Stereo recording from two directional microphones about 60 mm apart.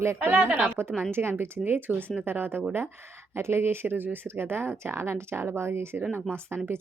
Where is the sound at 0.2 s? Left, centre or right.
Right.